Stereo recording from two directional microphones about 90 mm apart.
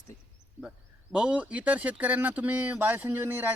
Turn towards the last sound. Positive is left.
turn(degrees=-25)  # may be behind; listen again after turning